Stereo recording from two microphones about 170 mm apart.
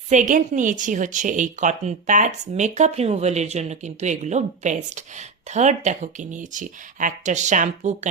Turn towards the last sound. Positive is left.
turn(degrees=-45)  # may be behind; listen again after turning